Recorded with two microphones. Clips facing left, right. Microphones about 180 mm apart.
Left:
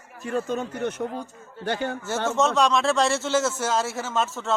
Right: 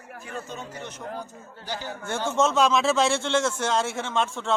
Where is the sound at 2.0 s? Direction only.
5° left (ahead or behind).